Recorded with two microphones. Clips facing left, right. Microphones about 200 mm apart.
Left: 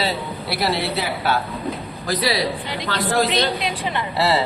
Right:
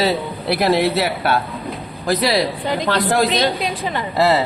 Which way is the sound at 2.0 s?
45° right (ahead or behind).